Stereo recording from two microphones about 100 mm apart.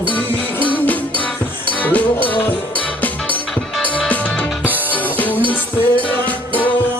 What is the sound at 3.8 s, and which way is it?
Music, 15° left (ahead or behind).